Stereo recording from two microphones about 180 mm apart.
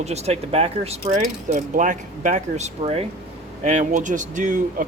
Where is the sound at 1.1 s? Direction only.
45° right (ahead or behind).